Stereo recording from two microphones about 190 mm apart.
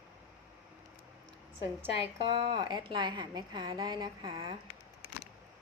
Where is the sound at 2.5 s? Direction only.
20° right (ahead or behind).